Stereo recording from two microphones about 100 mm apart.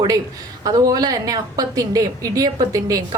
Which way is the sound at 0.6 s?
40° right (ahead or behind).